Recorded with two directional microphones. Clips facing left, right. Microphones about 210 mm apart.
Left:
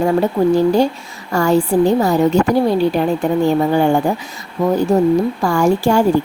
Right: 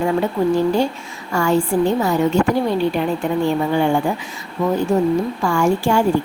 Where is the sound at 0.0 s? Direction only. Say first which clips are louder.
Left 4 dB; 40° left (ahead or behind).